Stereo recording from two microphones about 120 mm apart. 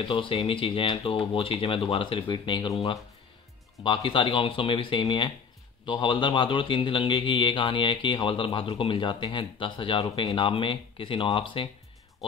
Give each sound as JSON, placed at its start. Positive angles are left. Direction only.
{"t": 0.0, "sound": "speech", "side_deg": 45}
{"t": 3.8, "sound": "speech", "side_deg": 45}